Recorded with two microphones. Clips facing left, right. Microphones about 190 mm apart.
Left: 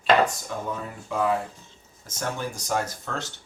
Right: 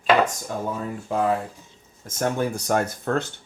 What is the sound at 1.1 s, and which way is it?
Speech, 45° right (ahead or behind).